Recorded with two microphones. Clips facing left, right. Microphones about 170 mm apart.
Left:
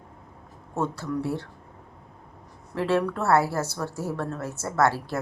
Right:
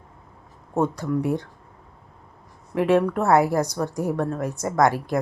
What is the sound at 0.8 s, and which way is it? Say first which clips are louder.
Speech: right 5 dB; 15° right (ahead or behind).